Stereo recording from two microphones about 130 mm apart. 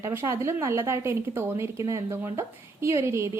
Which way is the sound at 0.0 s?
20° right (ahead or behind).